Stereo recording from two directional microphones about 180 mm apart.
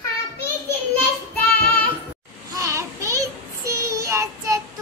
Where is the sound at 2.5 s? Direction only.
20° right (ahead or behind).